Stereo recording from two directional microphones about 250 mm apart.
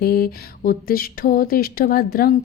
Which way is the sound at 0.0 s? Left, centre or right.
Left.